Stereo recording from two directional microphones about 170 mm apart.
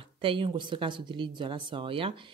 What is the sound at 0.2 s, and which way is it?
Speech, 30° right (ahead or behind).